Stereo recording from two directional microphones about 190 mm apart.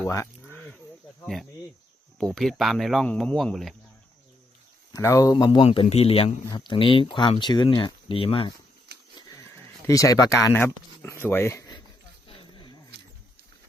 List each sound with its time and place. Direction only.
0.0 s a sound: 15° left (ahead or behind)
1.2 s speech: centre (ahead or behind)
4.9 s speech: 15° left (ahead or behind)
9.8 s speech: 20° left (ahead or behind)